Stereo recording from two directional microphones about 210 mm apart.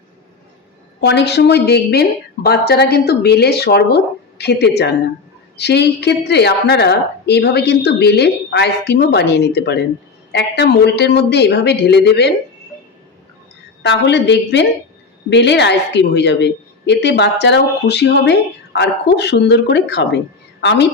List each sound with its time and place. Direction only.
1.0 s a woman's voice: 55° left (ahead or behind)
13.8 s a woman's voice: 55° left (ahead or behind)